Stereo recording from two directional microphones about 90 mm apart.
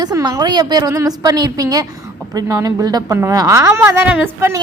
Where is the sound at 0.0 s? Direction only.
45° right (ahead or behind).